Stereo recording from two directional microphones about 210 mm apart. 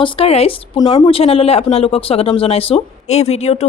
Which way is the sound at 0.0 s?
25° left (ahead or behind).